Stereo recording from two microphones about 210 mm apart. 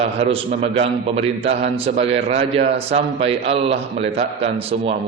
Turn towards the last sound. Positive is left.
turn(degrees=-30)  # may be behind; listen again after turning